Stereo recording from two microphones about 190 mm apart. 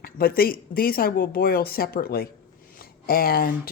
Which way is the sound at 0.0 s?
50° left (ahead or behind).